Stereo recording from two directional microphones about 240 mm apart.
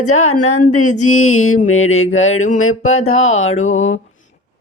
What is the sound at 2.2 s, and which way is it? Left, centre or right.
Music, left.